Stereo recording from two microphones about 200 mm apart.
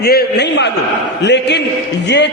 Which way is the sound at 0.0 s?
50° left (ahead or behind).